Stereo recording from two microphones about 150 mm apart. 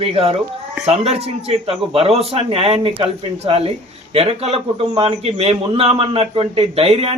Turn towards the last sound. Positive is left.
turn(degrees=-40)  # may be behind; listen again after turning